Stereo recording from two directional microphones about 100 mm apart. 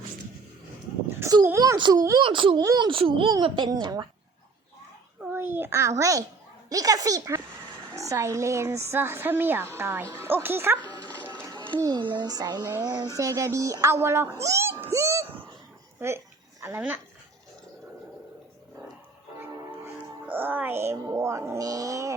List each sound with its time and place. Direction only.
1.5 s a sound: 35° right (ahead or behind)
1.8 s speech: 40° right (ahead or behind)
2.2 s a child's voice: 55° right (ahead or behind)
2.6 s a child's voice: 45° right (ahead or behind)
2.9 s a child's voice: 60° right (ahead or behind)
5.3 s a child's voice: 25° right (ahead or behind)
11.4 s a sound: 50° right (ahead or behind)
11.8 s a child's voice: 45° right (ahead or behind)
13.1 s a woman's voice: 30° right (ahead or behind)
16.0 s a sound: 25° right (ahead or behind)
19.4 s speech: 20° right (ahead or behind)